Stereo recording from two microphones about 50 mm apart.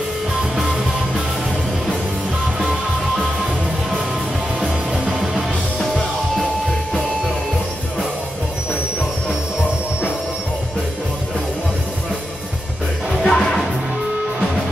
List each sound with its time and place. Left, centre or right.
4.6 s music: centre
13.2 s music: centre